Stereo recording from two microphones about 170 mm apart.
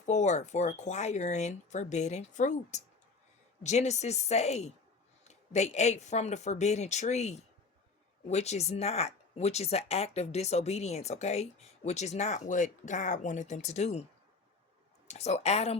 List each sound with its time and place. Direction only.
0.0 s speech: 40° left (ahead or behind)
15.0 s speech: 40° left (ahead or behind)